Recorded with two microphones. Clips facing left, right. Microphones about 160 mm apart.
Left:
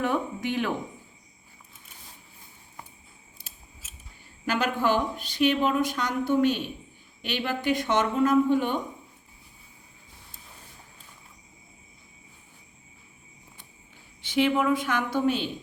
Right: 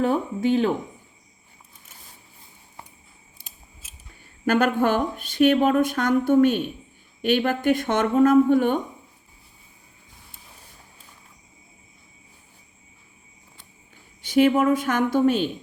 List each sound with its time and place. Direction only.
0.0 s speech: 30° right (ahead or behind)
4.4 s a woman's voice: 50° right (ahead or behind)
14.2 s a woman's voice: 45° right (ahead or behind)